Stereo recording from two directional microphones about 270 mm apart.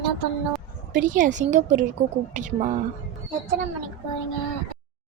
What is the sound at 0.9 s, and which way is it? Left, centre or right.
A woman's voice, right.